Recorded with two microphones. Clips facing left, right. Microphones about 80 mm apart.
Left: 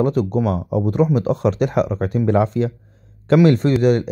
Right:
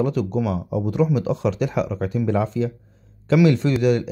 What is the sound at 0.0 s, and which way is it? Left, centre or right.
Speech, left.